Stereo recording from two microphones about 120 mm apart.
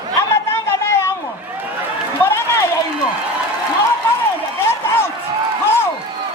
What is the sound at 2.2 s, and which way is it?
Run, 20° left (ahead or behind).